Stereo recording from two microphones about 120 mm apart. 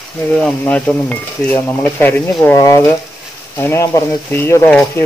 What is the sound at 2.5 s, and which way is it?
Speech, 25° left (ahead or behind).